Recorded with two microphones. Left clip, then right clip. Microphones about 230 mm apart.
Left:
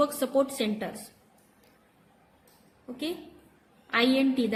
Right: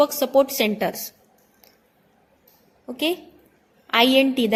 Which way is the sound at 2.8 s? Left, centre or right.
Right.